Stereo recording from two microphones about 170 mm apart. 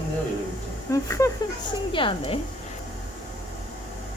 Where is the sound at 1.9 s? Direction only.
30° left (ahead or behind).